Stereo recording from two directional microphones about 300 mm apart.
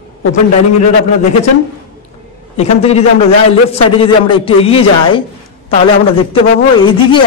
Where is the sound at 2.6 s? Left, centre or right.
Left.